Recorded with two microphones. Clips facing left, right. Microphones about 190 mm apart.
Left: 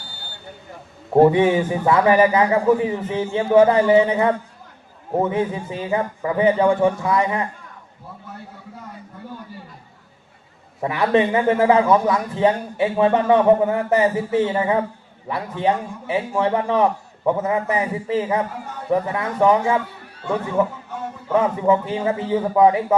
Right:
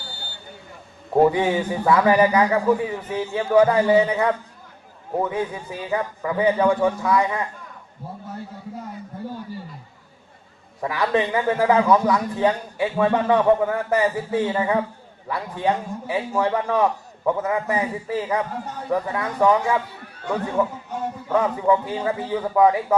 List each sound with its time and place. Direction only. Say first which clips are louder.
1.1 s a man's voice: left 4 dB; 25° left (ahead or behind)
10.8 s a man's voice: left 4 dB; 20° left (ahead or behind)
21.3 s a man's voice: left 2 dB; 25° left (ahead or behind)